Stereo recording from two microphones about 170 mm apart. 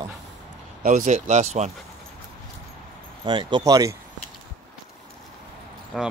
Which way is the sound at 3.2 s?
25° right (ahead or behind).